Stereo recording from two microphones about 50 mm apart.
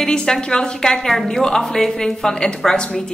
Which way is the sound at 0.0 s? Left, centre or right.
Centre.